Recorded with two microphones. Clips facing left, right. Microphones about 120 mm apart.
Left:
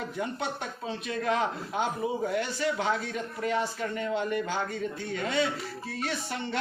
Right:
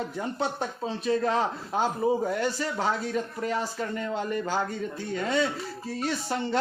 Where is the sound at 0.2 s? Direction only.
35° right (ahead or behind).